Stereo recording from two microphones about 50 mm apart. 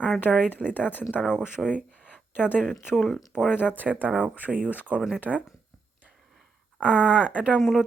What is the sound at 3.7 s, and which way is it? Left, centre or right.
Speech, right.